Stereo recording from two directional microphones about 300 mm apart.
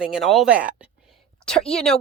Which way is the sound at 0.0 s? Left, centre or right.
Centre.